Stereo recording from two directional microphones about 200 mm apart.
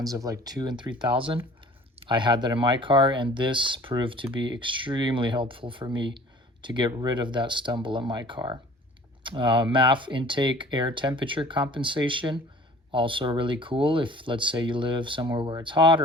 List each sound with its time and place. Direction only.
0.0 s speech: 15° right (ahead or behind)